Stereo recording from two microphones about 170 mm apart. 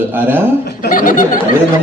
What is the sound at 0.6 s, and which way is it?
Speech, 70° left (ahead or behind).